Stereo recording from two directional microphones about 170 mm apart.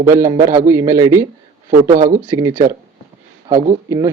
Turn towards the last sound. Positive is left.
turn(degrees=-20)  # may be behind; listen again after turning